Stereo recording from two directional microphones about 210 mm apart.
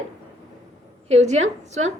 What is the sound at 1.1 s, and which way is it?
Speech, 30° right (ahead or behind).